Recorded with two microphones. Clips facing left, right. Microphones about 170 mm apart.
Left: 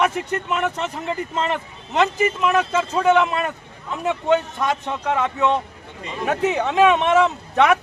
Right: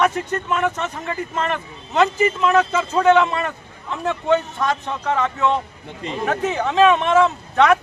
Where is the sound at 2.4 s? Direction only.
10° left (ahead or behind).